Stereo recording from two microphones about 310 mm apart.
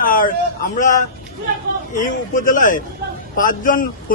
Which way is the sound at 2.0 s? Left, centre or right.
Left.